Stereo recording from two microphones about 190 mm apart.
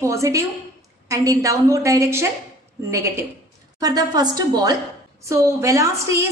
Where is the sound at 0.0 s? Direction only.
15° right (ahead or behind).